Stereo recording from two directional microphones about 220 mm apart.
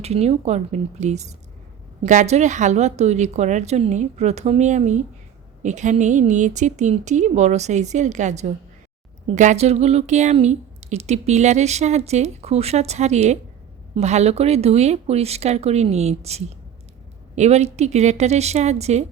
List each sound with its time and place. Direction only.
0.0 s a woman's voice: 30° right (ahead or behind)